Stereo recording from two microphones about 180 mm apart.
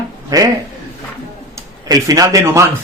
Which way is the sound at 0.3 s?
20° right (ahead or behind).